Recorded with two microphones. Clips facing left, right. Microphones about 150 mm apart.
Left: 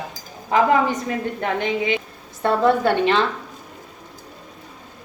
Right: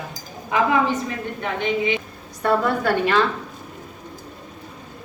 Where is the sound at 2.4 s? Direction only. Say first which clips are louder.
Left 3 dB; 25° left (ahead or behind).